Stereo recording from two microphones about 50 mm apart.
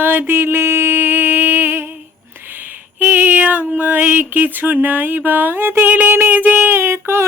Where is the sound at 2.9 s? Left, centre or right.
Right.